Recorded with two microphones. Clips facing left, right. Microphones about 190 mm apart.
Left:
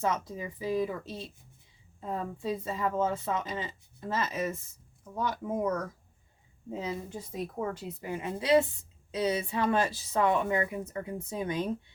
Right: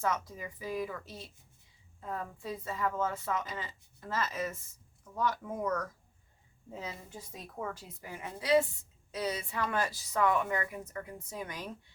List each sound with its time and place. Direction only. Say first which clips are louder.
0.0 s a woman's voice: left 3 dB; 20° left (ahead or behind)